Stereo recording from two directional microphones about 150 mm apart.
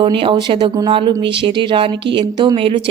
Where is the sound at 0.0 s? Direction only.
35° right (ahead or behind).